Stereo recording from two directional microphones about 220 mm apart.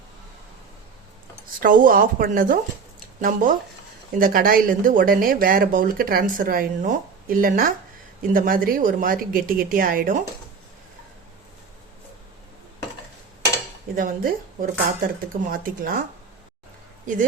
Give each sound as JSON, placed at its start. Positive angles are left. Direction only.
{"t": 1.6, "sound": "speech", "side_deg": -40}
{"t": 13.9, "sound": "speech", "side_deg": -40}